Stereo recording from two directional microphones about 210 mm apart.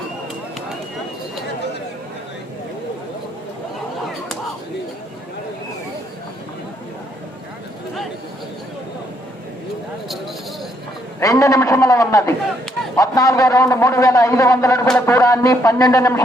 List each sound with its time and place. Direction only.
11.2 s a man's voice: 15° left (ahead or behind)